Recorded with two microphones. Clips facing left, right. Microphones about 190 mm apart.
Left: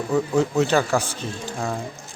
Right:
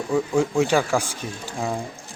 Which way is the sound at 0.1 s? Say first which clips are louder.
Even; 10° right (ahead or behind).